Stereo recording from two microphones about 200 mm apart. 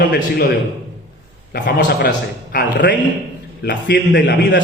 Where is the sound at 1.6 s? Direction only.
55° left (ahead or behind).